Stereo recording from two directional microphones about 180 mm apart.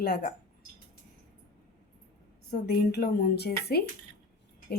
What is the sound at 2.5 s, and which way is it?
Speech, 60° left (ahead or behind).